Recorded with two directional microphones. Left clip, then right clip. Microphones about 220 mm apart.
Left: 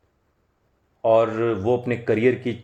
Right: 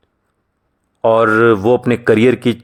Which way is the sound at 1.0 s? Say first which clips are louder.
Right 8 dB; 35° right (ahead or behind).